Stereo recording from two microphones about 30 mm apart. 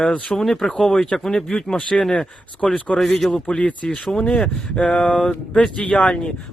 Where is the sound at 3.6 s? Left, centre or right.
Left.